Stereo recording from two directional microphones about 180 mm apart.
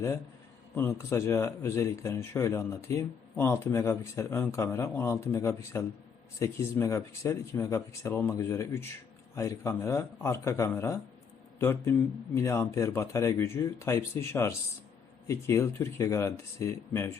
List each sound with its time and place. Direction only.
0.8 s speech: 15° left (ahead or behind)